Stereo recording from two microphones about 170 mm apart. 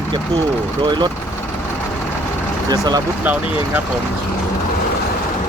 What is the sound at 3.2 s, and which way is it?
Speech, 10° right (ahead or behind).